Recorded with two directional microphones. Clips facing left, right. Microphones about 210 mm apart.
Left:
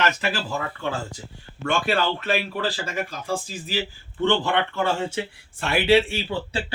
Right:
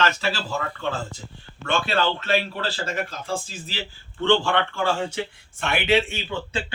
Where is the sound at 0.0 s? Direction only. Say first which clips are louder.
Even; 15° left (ahead or behind).